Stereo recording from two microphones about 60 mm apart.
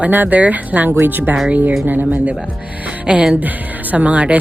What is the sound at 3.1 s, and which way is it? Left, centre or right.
Speech, centre.